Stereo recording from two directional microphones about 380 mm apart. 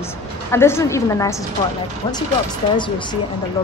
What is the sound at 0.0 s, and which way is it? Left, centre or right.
A woman's voice, centre.